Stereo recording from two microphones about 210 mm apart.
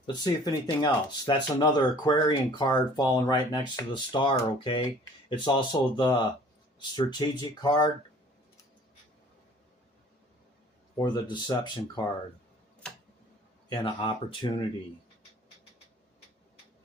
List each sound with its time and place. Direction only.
0.1 s speech: 20° left (ahead or behind)
10.9 s speech: 20° left (ahead or behind)
13.7 s speech: 25° left (ahead or behind)